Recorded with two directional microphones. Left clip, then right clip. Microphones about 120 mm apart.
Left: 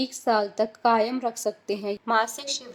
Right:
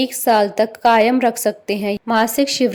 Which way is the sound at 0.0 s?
45° right (ahead or behind).